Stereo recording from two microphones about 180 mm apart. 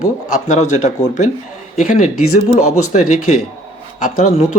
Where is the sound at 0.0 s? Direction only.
45° left (ahead or behind).